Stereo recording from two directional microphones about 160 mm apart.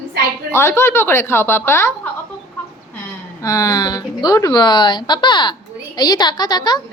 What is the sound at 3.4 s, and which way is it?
Speech, 20° left (ahead or behind).